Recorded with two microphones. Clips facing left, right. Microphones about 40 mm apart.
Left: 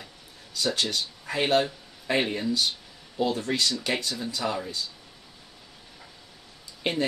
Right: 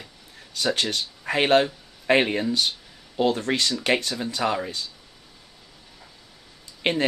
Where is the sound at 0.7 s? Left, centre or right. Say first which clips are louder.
Right 2 dB; right.